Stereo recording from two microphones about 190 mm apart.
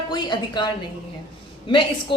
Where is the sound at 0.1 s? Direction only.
20° left (ahead or behind).